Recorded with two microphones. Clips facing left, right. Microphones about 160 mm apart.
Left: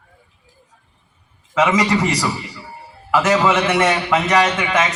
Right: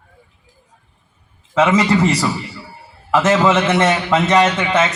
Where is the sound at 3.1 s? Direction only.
25° right (ahead or behind).